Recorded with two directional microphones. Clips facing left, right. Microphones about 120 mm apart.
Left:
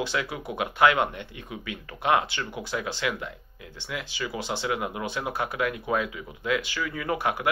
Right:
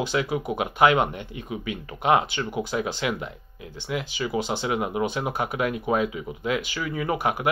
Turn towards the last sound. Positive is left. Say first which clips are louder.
# right 2 dB
turn(degrees=-20)  # may be behind; listen again after turning